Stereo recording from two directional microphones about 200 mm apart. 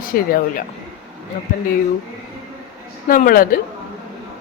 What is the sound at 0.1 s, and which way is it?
Speech, 45° left (ahead or behind).